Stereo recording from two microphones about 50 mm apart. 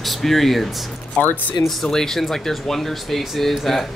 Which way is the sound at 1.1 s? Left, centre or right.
Left.